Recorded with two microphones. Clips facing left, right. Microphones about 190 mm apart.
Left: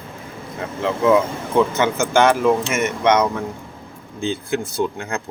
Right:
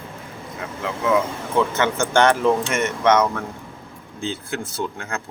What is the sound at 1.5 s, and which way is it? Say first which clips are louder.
Speech: left 3 dB; 10° left (ahead or behind).